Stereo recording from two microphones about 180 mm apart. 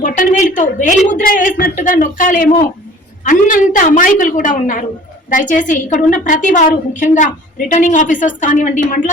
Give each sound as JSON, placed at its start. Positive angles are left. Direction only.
{"t": 0.0, "sound": "a woman's voice", "side_deg": 45}